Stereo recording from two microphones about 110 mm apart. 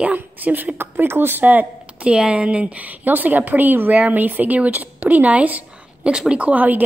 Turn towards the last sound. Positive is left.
turn(degrees=-15)  # may be behind; listen again after turning